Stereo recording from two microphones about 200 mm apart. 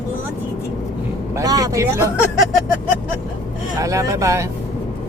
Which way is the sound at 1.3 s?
20° right (ahead or behind).